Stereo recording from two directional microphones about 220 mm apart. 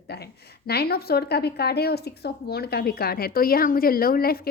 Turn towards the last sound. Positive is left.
turn(degrees=45)  # may be behind; listen again after turning